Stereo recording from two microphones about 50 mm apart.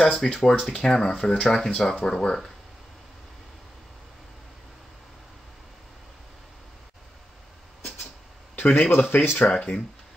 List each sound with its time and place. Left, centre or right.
0.0 s speech: centre
8.5 s speech: left
9.4 s speech: left